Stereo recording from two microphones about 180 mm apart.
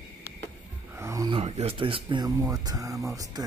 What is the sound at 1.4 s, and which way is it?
Speech, 35° right (ahead or behind).